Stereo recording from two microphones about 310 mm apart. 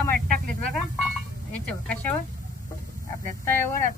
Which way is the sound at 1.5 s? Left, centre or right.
Centre.